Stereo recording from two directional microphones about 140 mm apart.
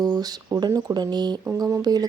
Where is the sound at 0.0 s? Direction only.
30° right (ahead or behind).